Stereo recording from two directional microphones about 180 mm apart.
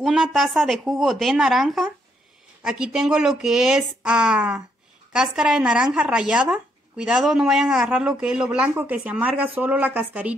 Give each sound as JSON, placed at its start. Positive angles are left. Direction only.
{"t": 0.0, "sound": "speech", "side_deg": 0}